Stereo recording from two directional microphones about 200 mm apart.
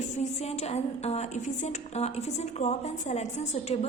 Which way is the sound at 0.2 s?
30° left (ahead or behind).